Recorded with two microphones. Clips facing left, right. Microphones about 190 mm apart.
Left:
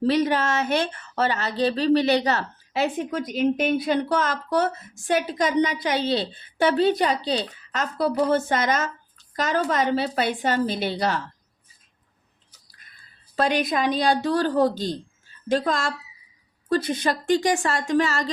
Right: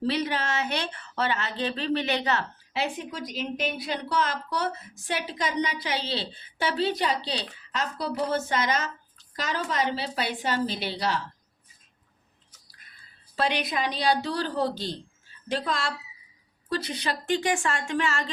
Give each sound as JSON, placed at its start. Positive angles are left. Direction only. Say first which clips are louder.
{"t": 0.1, "sound": "a woman's voice", "louder": "left 8 dB", "side_deg": 45}
{"t": 13.3, "sound": "a woman's voice", "louder": "left 5 dB", "side_deg": 45}